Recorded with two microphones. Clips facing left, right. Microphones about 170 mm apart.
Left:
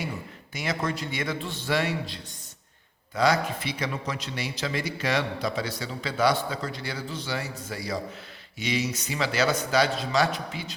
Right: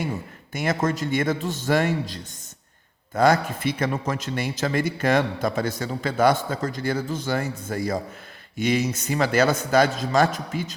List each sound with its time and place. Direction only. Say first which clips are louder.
0.5 s a man's voice: right 6 dB; 50° right (ahead or behind)